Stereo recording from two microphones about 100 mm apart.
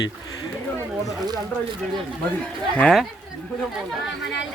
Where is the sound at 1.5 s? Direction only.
20° left (ahead or behind).